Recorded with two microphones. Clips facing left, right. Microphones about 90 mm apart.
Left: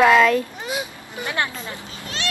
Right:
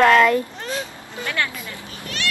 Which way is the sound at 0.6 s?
10° left (ahead or behind).